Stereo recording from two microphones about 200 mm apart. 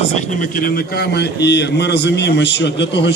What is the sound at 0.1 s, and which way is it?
A man's voice, 40° left (ahead or behind).